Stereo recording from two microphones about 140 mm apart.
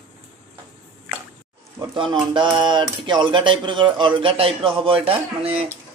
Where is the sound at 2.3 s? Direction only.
35° right (ahead or behind).